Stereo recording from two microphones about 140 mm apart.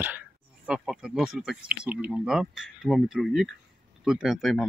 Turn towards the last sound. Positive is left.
turn(degrees=0)  # may be behind; listen again after turning